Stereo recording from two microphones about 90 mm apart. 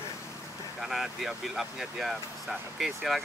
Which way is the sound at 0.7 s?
5° right (ahead or behind).